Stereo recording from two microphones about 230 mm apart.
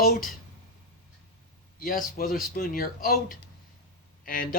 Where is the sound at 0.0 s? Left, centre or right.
Left.